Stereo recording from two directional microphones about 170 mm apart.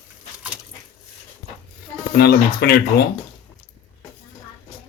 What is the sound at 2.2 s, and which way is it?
Speech, 70° left (ahead or behind).